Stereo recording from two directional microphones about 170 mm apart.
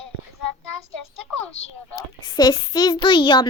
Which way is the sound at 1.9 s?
25° left (ahead or behind).